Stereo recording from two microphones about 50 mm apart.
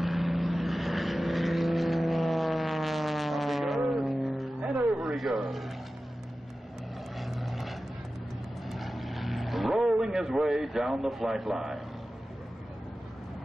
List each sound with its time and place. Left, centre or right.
0.0 s vehicle: centre
4.6 s music: right
5.0 s a sound: centre
5.4 s vehicle: centre
7.2 s vehicle: centre